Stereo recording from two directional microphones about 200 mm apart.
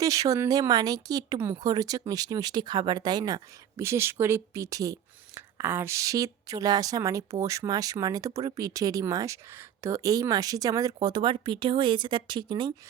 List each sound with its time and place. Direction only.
0.0 s speech: 15° right (ahead or behind)